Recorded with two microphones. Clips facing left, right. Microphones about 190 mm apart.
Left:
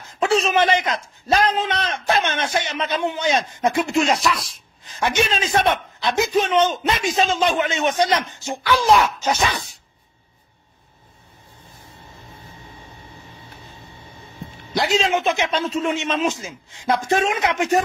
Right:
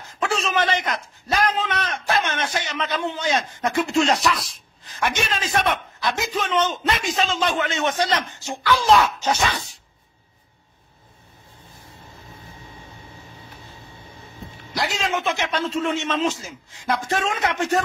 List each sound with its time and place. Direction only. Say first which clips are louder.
0.2 s a man's voice: left 5 dB; 20° left (ahead or behind)
4.2 s speech: even; centre (ahead or behind)
4.8 s a man's voice: left 4 dB; 20° left (ahead or behind)
14.7 s a man's voice: left 5 dB; 25° left (ahead or behind)